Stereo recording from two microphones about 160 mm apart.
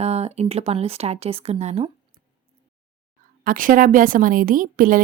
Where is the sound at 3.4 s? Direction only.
60° right (ahead or behind).